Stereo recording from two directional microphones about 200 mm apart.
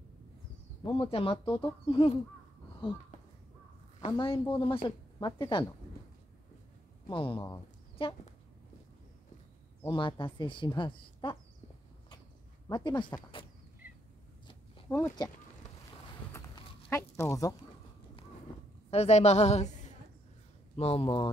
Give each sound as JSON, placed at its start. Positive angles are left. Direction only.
{"t": 1.1, "sound": "speech", "side_deg": 25}
{"t": 4.0, "sound": "a woman's voice", "side_deg": 25}
{"t": 7.1, "sound": "a woman's voice", "side_deg": 25}
{"t": 9.8, "sound": "speech", "side_deg": 25}
{"t": 12.6, "sound": "speech", "side_deg": 20}
{"t": 14.9, "sound": "speech", "side_deg": 15}
{"t": 16.3, "sound": "a sound", "side_deg": 15}
{"t": 18.9, "sound": "a woman's voice", "side_deg": 30}